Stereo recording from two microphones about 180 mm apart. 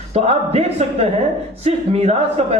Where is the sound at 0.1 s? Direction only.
35° right (ahead or behind).